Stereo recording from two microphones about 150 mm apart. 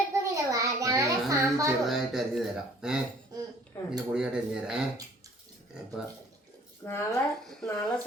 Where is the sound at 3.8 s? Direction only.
20° left (ahead or behind).